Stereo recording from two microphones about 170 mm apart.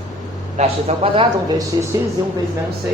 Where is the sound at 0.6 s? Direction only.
35° right (ahead or behind).